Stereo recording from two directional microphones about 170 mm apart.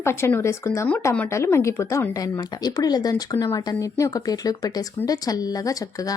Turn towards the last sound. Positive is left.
turn(degrees=20)  # may be behind; listen again after turning